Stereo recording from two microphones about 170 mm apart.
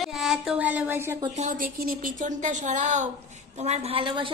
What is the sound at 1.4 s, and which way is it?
A woman's voice, 50° right (ahead or behind).